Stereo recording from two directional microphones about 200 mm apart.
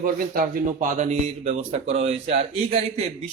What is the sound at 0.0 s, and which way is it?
Speech, 45° right (ahead or behind).